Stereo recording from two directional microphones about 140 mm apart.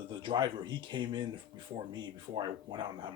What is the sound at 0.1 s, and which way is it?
Speech, 35° right (ahead or behind).